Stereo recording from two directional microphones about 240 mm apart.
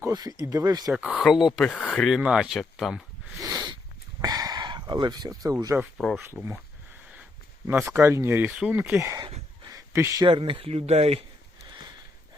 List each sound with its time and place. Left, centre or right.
0.0 s speech: centre
0.9 s speech: centre
3.3 s a sound: centre
4.2 s speech: centre
6.0 s speech: centre
7.7 s speech: centre; by 11.2 s right